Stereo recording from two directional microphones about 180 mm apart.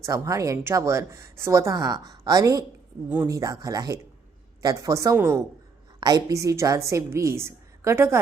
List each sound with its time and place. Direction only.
0.0 s a woman's voice: 20° right (ahead or behind)